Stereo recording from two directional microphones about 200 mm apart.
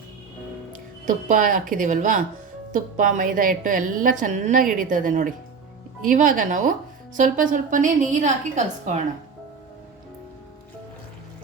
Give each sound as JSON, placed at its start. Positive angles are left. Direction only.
{"t": 0.7, "sound": "a woman's voice", "side_deg": -40}